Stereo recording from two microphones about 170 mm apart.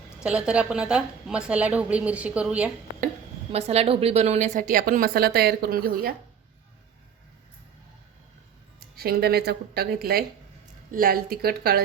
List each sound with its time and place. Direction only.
0.2 s a woman's voice: 5° right (ahead or behind)
3.5 s a woman's voice: 40° right (ahead or behind); by 6.1 s 60° right (ahead or behind)
8.8 s speech: 65° right (ahead or behind)